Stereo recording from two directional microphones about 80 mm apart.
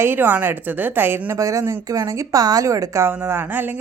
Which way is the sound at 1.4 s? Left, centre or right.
Right.